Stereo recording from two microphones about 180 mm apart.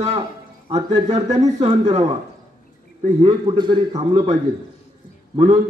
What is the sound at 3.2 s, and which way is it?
A man's voice, 25° right (ahead or behind).